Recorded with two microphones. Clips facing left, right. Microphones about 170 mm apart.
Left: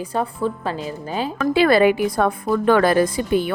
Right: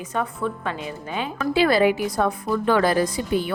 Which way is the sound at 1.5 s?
60° left (ahead or behind).